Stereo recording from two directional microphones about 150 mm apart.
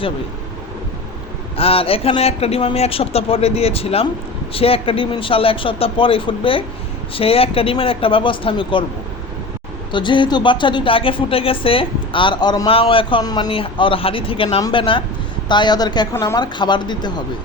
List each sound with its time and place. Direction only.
1.5 s speech: 40° left (ahead or behind)
9.9 s a woman's voice: 30° left (ahead or behind)